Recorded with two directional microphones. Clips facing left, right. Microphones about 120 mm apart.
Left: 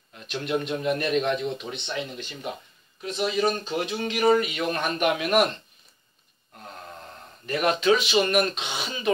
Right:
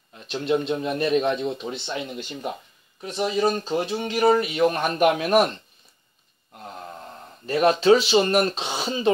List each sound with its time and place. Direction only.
0.3 s speech: 25° right (ahead or behind)
3.2 s speech: 25° right (ahead or behind)
4.1 s speech: 35° right (ahead or behind)
7.4 s speech: 30° right (ahead or behind)